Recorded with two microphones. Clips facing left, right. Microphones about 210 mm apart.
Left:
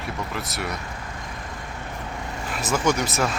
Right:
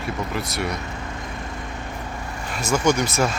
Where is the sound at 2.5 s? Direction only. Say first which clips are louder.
Right 3 dB; centre (ahead or behind).